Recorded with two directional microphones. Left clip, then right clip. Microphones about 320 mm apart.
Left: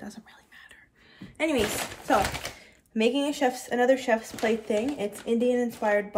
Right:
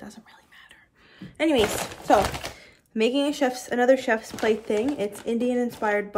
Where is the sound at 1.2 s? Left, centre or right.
Centre.